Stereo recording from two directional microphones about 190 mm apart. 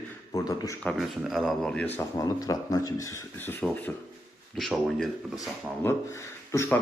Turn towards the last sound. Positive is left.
turn(degrees=15)  # may be behind; listen again after turning